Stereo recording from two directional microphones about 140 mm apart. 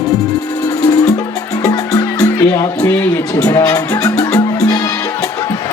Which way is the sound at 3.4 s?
25° left (ahead or behind).